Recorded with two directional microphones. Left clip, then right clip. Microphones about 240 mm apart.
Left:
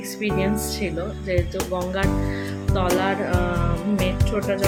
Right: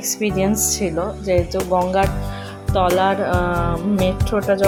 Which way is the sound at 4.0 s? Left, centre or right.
Centre.